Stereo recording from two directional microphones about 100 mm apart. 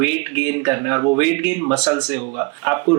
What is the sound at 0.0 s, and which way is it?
Speech, 15° right (ahead or behind).